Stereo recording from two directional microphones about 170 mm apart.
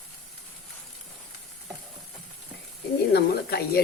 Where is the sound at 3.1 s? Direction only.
65° left (ahead or behind).